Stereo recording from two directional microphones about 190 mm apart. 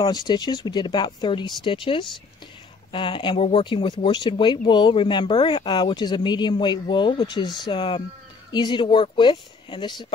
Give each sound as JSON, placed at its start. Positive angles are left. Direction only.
{"t": 0.0, "sound": "speech", "side_deg": 20}